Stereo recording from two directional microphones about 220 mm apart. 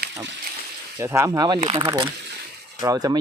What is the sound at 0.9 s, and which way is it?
Speech, 15° right (ahead or behind).